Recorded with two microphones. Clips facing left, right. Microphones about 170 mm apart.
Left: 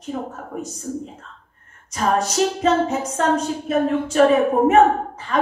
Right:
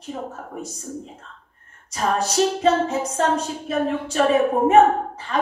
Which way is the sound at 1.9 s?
30° right (ahead or behind).